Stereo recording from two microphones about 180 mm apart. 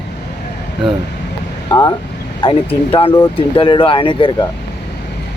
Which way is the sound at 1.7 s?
20° left (ahead or behind).